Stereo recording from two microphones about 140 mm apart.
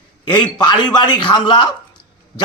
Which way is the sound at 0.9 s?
30° left (ahead or behind).